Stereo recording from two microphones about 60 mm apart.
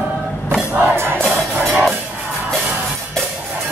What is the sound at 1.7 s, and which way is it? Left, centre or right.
Music, centre.